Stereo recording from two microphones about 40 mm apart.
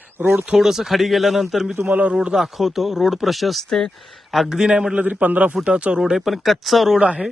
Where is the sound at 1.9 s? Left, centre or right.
Right.